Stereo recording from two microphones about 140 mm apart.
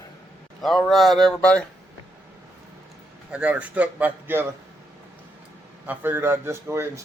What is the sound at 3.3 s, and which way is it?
Speech, 5° right (ahead or behind).